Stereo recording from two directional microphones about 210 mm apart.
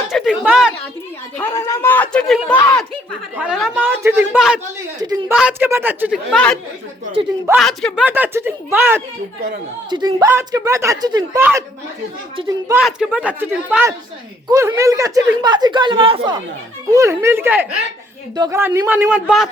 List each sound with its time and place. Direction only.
0.1 s a sound: centre (ahead or behind)
1.4 s a sound: 10° left (ahead or behind)
3.3 s speech: 5° right (ahead or behind)
6.3 s speech: 5° left (ahead or behind)
7.0 s speech: 25° right (ahead or behind)
7.6 s speech: centre (ahead or behind)
9.9 s speech: 20° right (ahead or behind)
12.7 s speech: 5° right (ahead or behind)